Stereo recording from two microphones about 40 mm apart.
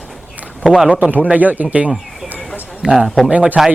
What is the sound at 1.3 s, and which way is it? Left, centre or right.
Speech, right.